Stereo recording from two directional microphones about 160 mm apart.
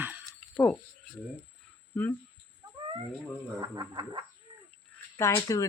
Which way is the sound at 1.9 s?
10° left (ahead or behind).